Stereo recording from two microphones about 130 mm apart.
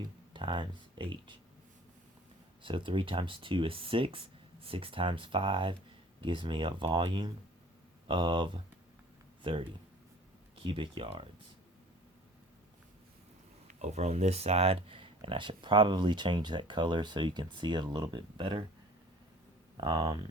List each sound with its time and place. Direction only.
0.3 s speech: 40° right (ahead or behind)
2.6 s speech: 40° right (ahead or behind)
13.7 s speech: 60° right (ahead or behind); by 18.6 s 40° right (ahead or behind)
19.7 s speech: 35° right (ahead or behind)